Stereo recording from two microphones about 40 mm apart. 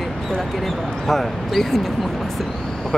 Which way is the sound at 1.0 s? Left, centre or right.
Centre.